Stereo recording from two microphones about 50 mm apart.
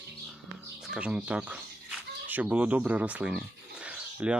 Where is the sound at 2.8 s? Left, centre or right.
Right.